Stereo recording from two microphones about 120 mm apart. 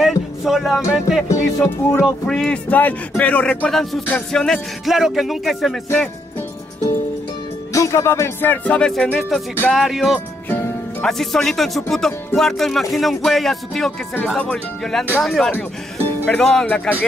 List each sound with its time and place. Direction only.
0.0 s music: centre (ahead or behind)
1.6 s music: 20° left (ahead or behind)
2.0 s speech: 5° left (ahead or behind)
7.7 s speech: 25° left (ahead or behind); by 16.9 s 10° left (ahead or behind)